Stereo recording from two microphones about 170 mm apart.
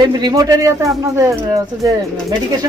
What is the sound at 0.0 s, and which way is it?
A man's voice, 25° right (ahead or behind).